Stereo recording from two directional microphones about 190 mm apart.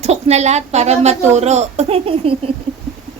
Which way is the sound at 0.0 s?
35° right (ahead or behind).